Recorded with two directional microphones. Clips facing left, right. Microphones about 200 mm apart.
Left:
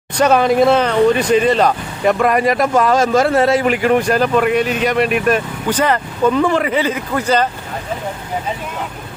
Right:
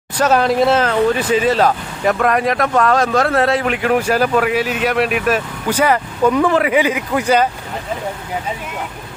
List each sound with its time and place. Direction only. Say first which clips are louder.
0.2 s speech: left 2 dB; centre (ahead or behind)